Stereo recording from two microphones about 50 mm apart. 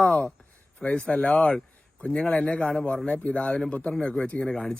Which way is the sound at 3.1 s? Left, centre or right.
Left.